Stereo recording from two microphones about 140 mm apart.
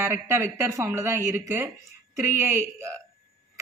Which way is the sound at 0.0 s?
15° right (ahead or behind).